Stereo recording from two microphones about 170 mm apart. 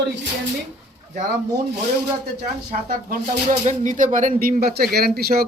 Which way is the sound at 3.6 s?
45° right (ahead or behind).